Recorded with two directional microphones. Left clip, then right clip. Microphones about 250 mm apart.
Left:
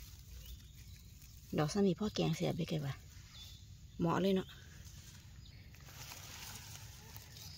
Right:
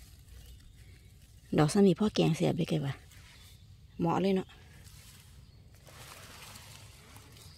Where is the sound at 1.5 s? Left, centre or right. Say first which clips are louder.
Right 9 dB; right.